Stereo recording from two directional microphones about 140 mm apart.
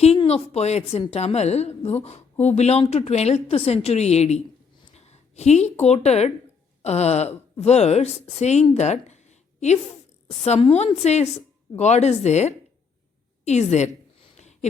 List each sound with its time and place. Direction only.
0.3 s speech: 50° left (ahead or behind)
10.2 s speech: 45° left (ahead or behind)
13.4 s a sound: 55° left (ahead or behind)